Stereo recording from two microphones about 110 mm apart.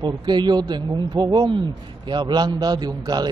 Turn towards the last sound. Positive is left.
turn(degrees=-40)  # may be behind; listen again after turning